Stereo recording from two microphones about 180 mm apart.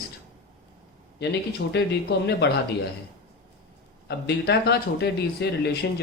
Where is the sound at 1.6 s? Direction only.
90° left.